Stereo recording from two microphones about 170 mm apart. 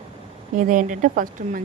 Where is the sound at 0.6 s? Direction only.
50° right (ahead or behind).